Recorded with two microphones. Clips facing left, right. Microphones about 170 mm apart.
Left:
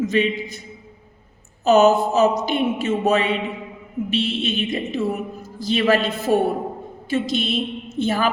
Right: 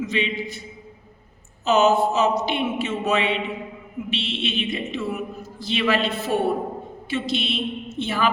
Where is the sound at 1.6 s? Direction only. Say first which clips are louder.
Left 3 dB; 40° left (ahead or behind).